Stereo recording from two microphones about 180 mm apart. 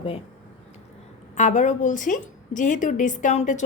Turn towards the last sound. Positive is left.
turn(degrees=40)  # may be behind; listen again after turning